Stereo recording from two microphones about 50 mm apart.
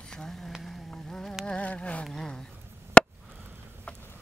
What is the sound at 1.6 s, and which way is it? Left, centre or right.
Insect, left.